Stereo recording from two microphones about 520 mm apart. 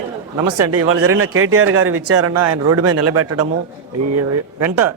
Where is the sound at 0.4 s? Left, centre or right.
Right.